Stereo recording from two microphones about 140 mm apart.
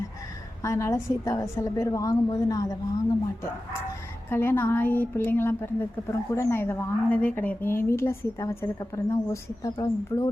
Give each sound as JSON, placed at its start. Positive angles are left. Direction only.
{"t": 0.6, "sound": "a woman's voice", "side_deg": 20}
{"t": 4.3, "sound": "a woman's voice", "side_deg": 15}